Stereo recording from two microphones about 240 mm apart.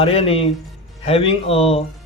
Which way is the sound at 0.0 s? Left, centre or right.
Left.